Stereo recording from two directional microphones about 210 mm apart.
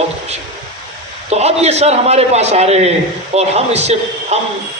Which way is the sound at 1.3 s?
30° right (ahead or behind).